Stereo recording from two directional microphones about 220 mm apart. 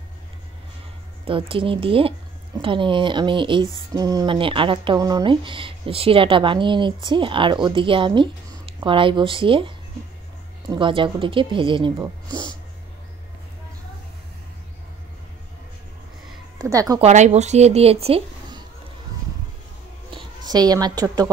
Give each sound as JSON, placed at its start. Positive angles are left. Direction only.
{"t": 1.2, "sound": "speech", "side_deg": -25}
{"t": 16.5, "sound": "speech", "side_deg": -15}
{"t": 17.0, "sound": "speech", "side_deg": -30}
{"t": 20.1, "sound": "a woman's voice", "side_deg": -20}